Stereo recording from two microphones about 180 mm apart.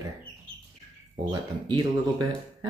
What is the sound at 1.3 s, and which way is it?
Speech, 25° right (ahead or behind).